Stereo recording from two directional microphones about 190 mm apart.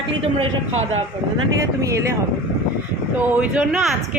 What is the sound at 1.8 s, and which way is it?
Speech, 15° right (ahead or behind).